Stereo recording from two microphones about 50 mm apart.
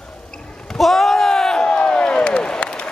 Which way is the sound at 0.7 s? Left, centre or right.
Centre.